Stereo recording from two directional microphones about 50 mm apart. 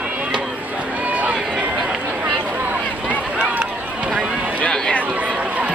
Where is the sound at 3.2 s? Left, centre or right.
Right.